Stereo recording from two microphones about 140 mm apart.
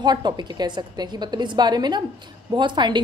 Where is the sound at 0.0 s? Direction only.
30° right (ahead or behind).